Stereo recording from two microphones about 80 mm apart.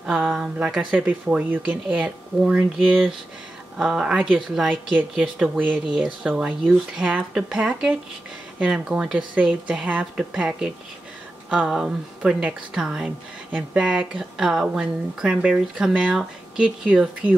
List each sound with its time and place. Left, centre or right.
0.0 s speech: centre
13.5 s speech: centre
13.8 s speech: centre